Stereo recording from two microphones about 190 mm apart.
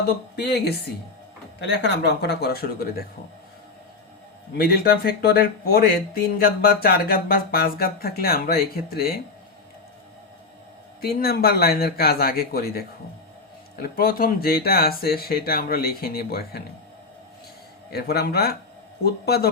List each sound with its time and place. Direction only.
0.3 s speech: 60° left (ahead or behind)
4.5 s speech: 55° left (ahead or behind)
11.0 s speech: 55° left (ahead or behind)
17.9 s speech: 55° left (ahead or behind)